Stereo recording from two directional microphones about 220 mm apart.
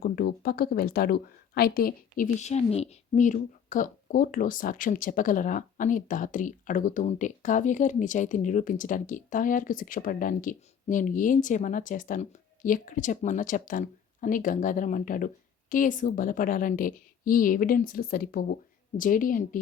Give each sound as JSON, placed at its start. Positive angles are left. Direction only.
{"t": 0.0, "sound": "a woman's voice", "side_deg": 45}